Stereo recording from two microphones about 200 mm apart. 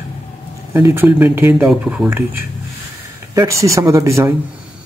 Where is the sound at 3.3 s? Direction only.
15° right (ahead or behind).